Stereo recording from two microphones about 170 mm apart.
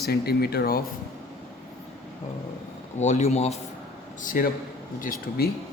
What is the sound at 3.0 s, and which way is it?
Speech, 45° left (ahead or behind).